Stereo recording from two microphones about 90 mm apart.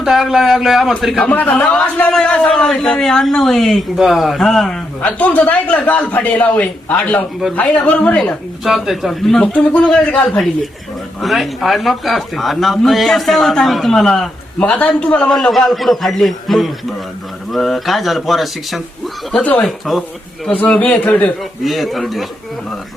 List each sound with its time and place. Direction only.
0.0 s a man's voice: 5° right (ahead or behind)
1.2 s a man's voice: 15° left (ahead or behind)
5.0 s a man's voice: 15° left (ahead or behind)
8.6 s a man's voice: 5° right (ahead or behind)
11.2 s a man's voice: centre (ahead or behind)
19.3 s a man's voice: 15° left (ahead or behind)
19.6 s a man's voice: centre (ahead or behind)
20.5 s a man's voice: 15° left (ahead or behind)
21.6 s a man's voice: centre (ahead or behind)